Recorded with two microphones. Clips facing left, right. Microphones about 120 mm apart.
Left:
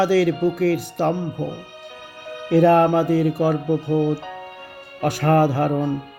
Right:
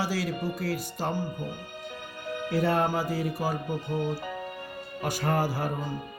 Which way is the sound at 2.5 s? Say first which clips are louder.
Left 12 dB; 65° left (ahead or behind).